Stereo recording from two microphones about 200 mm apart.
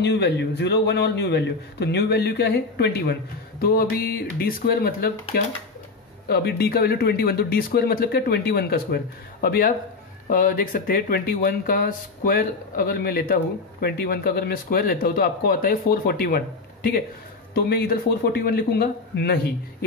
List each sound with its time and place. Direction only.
0.0 s a man's voice: 55° left (ahead or behind)
6.2 s speech: 55° left (ahead or behind)